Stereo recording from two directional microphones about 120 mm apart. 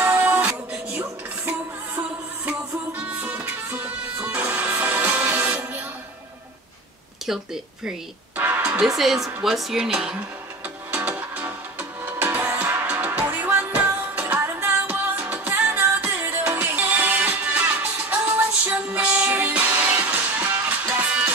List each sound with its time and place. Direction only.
0.0 s music: 15° right (ahead or behind)
7.2 s speech: 5° right (ahead or behind)
10.9 s music: 15° right (ahead or behind)